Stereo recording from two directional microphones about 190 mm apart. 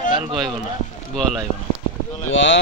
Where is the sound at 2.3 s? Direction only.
70° left (ahead or behind).